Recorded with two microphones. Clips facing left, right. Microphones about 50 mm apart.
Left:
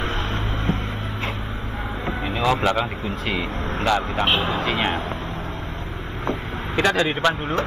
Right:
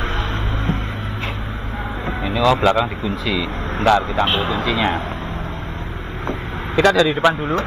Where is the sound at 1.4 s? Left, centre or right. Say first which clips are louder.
Right 2 dB; centre.